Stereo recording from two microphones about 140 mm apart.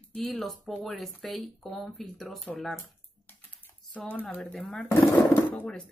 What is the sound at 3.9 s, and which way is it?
Speech, 10° left (ahead or behind).